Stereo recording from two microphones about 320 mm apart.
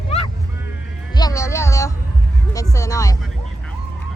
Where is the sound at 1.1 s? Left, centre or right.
Centre.